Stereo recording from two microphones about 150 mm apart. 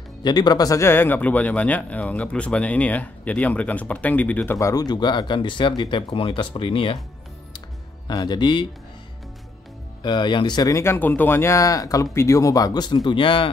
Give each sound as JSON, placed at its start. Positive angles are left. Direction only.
{"t": 0.2, "sound": "speech", "side_deg": 30}
{"t": 4.6, "sound": "speech", "side_deg": 25}
{"t": 8.1, "sound": "speech", "side_deg": 25}
{"t": 10.0, "sound": "speech", "side_deg": 30}